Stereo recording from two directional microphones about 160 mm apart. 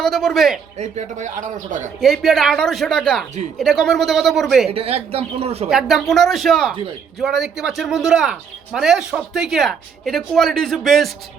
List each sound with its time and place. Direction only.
0.0 s speech: centre (ahead or behind)
0.8 s speech: 45° right (ahead or behind)
2.0 s speech: centre (ahead or behind)
4.7 s speech: 40° right (ahead or behind)
5.6 s speech: centre (ahead or behind)